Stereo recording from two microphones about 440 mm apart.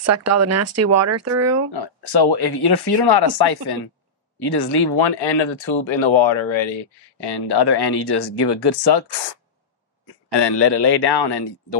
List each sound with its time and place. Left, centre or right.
0.0 s speech: right
1.7 s speech: left